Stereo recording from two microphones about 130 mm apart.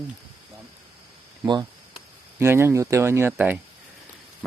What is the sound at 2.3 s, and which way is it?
Speech, 20° right (ahead or behind).